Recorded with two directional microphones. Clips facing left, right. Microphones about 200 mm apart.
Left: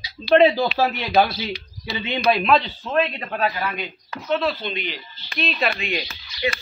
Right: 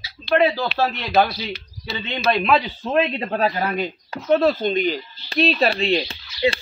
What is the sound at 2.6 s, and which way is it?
Speech, 25° right (ahead or behind).